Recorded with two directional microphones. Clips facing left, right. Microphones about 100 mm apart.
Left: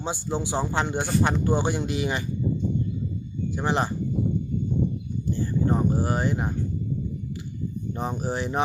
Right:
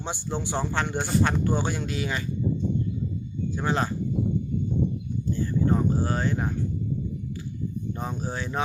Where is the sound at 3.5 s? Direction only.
15° left (ahead or behind).